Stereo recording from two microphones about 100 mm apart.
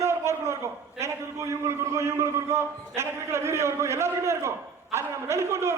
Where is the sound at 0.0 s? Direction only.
30° right (ahead or behind).